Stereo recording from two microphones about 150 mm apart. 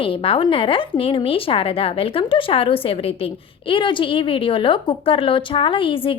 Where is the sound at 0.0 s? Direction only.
35° left (ahead or behind).